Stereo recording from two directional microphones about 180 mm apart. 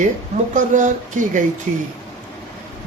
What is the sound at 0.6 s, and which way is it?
Speech, 45° right (ahead or behind).